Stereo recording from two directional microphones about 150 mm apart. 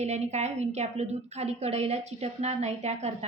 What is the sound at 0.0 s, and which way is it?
A woman's voice, 45° right (ahead or behind).